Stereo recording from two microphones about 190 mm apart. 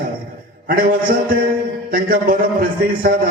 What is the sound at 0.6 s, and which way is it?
A man's voice, 50° right (ahead or behind).